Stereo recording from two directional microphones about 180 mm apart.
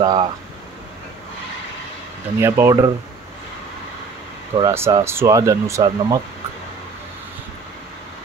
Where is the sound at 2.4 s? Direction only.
15° right (ahead or behind).